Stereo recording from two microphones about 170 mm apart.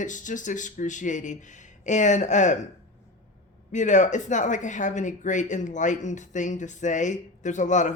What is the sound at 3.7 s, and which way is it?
Speech, 45° left (ahead or behind).